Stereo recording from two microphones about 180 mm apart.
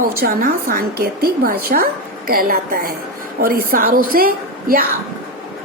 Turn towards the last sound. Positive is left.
turn(degrees=-55)  # may be behind; listen again after turning